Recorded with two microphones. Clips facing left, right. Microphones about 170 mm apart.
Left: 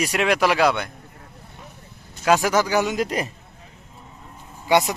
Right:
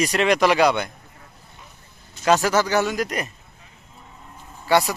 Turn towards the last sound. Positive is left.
turn(degrees=20)  # may be behind; listen again after turning